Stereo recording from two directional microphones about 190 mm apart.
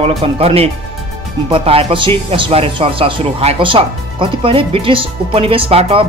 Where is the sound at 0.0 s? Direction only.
30° right (ahead or behind).